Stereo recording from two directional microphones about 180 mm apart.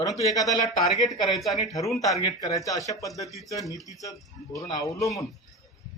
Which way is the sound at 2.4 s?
20° left (ahead or behind).